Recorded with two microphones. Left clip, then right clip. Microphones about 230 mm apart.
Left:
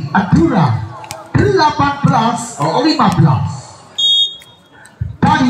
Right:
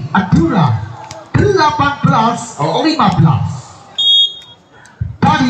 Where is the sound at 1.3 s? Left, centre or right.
Right.